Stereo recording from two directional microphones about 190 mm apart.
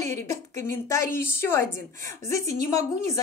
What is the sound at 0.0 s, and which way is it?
Speech, 15° left (ahead or behind).